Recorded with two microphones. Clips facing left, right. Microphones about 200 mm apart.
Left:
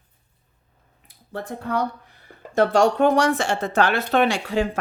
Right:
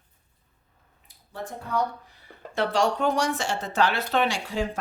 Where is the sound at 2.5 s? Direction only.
45° left (ahead or behind).